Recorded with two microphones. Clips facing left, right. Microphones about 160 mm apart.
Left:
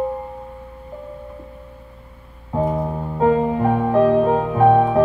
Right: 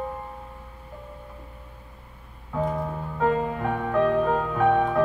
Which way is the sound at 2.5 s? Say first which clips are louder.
Left 6 dB; 30° left (ahead or behind).